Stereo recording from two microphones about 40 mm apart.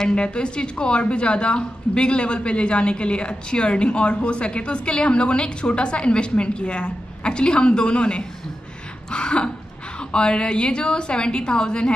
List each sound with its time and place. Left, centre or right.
0.1 s a woman's voice: left